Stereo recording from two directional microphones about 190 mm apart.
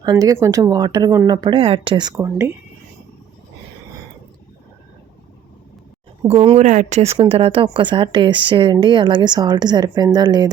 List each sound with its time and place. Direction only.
0.0 s speech: 20° right (ahead or behind)
6.2 s speech: 30° right (ahead or behind)